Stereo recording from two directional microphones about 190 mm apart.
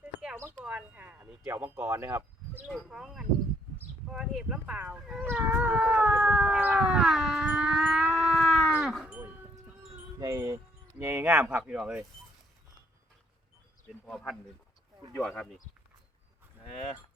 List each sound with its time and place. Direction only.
0.2 s speech: 10° right (ahead or behind)
4.1 s dog: 5° right (ahead or behind)
10.2 s wind chime: 20° right (ahead or behind)
10.9 s speech: 10° right (ahead or behind)
14.1 s speech: centre (ahead or behind)
16.7 s speech: 35° left (ahead or behind)